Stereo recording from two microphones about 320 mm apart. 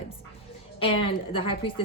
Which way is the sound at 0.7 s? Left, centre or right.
Centre.